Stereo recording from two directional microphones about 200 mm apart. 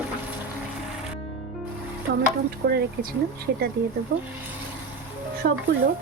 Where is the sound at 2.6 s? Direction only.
55° right (ahead or behind).